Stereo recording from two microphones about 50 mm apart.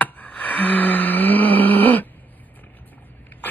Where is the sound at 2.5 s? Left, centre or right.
Left.